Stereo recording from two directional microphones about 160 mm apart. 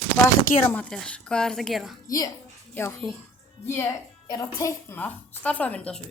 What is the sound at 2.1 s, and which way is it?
Speech, 20° left (ahead or behind).